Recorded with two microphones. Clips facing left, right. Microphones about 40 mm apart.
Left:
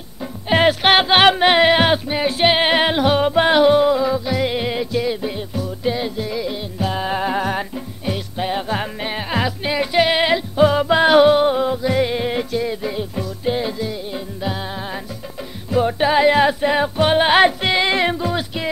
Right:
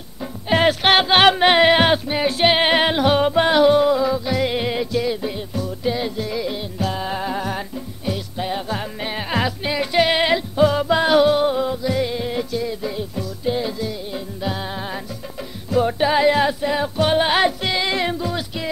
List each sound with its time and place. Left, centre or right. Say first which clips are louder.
0.5 s music: left 2 dB; centre
3.4 s music: left 2 dB; centre
6.8 s music: left 4 dB; left
7.3 s music: left 4 dB; left
8.0 s music: left 2 dB; left
9.0 s music: right 2 dB; centre
10.6 s music: left 3 dB; left
14.4 s music: even; centre
16.0 s music: left 3 dB; left
16.3 s music: left 3 dB; left